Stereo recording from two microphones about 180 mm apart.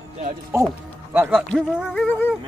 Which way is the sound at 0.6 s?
10° right (ahead or behind).